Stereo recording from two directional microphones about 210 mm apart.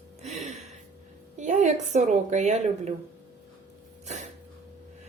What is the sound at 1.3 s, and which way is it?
A woman's voice, 35° right (ahead or behind).